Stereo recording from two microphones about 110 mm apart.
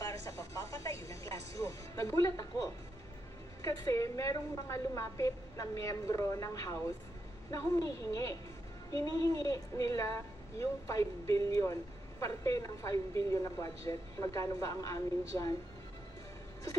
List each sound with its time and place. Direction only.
0.0 s music: 30° left (ahead or behind)
3.6 s a woman's voice: 30° left (ahead or behind)
9.4 s a woman's voice: 30° left (ahead or behind)